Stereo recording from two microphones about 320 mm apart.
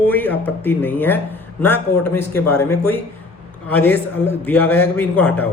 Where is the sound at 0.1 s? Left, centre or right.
Centre.